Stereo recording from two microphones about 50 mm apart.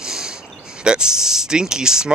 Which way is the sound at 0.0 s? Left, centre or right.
Centre.